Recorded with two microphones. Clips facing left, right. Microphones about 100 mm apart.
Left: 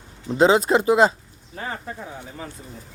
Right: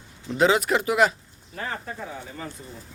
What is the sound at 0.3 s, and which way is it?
Speech, 30° left (ahead or behind).